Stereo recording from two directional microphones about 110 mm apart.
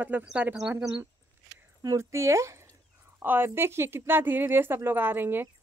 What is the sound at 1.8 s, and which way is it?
A woman's voice, 30° right (ahead or behind).